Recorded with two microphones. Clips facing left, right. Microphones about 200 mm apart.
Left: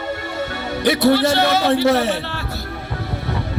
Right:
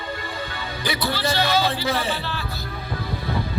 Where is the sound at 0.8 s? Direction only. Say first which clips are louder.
Left 11 dB; 70° left (ahead or behind).